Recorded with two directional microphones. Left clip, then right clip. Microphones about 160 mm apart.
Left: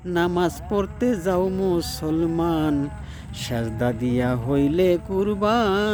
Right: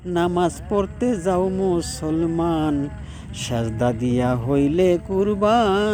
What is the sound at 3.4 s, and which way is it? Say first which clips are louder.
Speech: right 3 dB; 5° left (ahead or behind).